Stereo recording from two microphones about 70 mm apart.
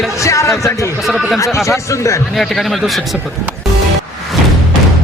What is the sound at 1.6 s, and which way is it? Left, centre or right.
Speech, left.